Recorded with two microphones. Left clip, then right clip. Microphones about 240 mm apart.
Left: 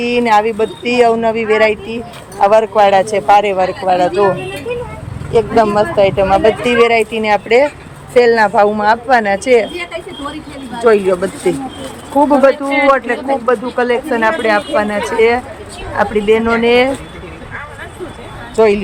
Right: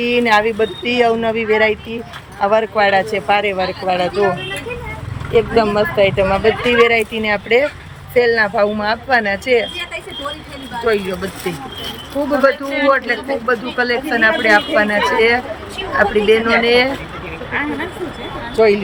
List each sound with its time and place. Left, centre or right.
0.0 s speech: centre
5.3 s speech: centre
10.8 s speech: centre
12.5 s speech: centre
18.5 s speech: centre